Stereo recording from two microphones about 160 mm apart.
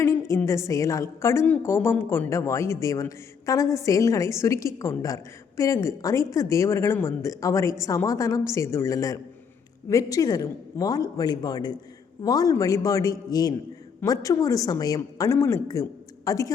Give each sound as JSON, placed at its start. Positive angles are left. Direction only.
{"t": 0.0, "sound": "a woman's voice", "side_deg": 15}